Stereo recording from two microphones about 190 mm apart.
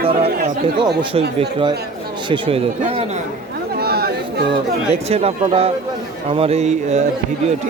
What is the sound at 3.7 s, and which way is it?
Chatter, 55° right (ahead or behind).